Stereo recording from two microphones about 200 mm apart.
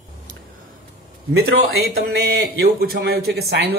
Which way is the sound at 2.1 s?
50° right (ahead or behind).